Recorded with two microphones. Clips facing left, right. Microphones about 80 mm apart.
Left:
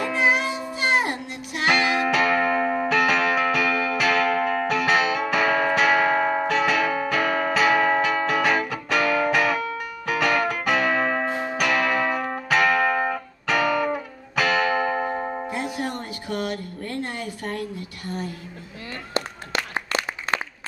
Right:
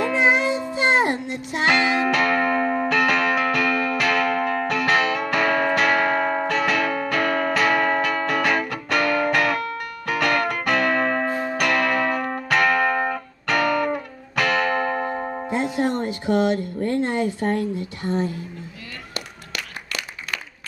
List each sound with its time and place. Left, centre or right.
0.1 s music: right
1.7 s music: centre
2.0 s music: centre
11.2 s church bell: centre
11.5 s music: centre
15.4 s music: right
19.1 s a sound: left